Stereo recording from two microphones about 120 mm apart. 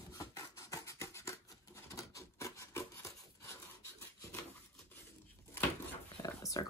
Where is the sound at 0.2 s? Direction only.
25° left (ahead or behind).